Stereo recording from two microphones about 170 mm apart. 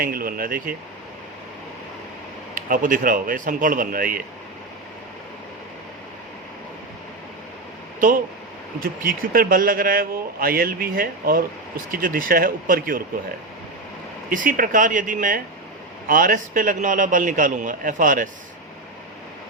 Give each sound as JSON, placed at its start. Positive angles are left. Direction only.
{"t": 0.0, "sound": "a man's voice", "side_deg": -60}
{"t": 2.6, "sound": "a man's voice", "side_deg": -55}
{"t": 8.8, "sound": "a man's voice", "side_deg": -55}
{"t": 14.3, "sound": "a man's voice", "side_deg": -55}